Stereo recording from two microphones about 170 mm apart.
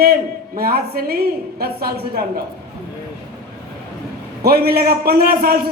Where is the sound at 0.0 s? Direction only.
65° right (ahead or behind).